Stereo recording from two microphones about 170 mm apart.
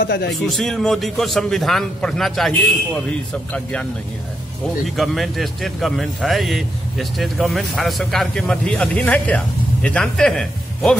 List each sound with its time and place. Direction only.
0.0 s a man's voice: 70° left (ahead or behind)
0.3 s a man's voice: centre (ahead or behind)
4.9 s a man's voice: centre (ahead or behind)